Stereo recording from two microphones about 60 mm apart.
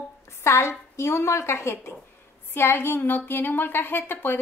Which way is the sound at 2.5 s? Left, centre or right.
Left.